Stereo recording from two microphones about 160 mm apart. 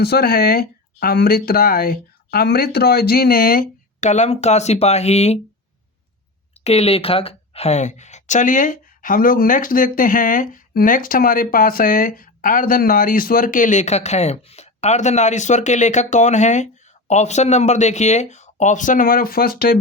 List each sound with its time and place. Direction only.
0.0 s speech: 80° left
4.0 s a woman's voice: 45° left (ahead or behind)
6.7 s a woman's voice: 40° left (ahead or behind); by 19.8 s 70° left (ahead or behind)